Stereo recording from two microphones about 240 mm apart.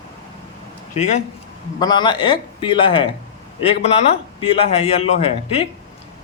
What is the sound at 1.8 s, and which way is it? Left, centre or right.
A man's voice, centre.